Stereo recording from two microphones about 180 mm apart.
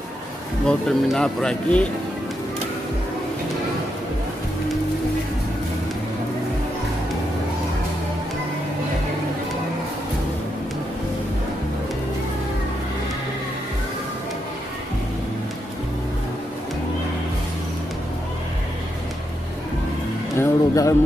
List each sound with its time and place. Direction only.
0.7 s speech: 5° left (ahead or behind)
20.3 s music: 15° left (ahead or behind)